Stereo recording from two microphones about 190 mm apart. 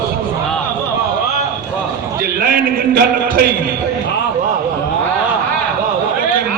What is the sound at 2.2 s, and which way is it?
Speech, 50° right (ahead or behind).